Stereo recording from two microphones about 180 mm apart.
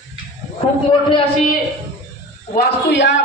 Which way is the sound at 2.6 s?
70° left (ahead or behind).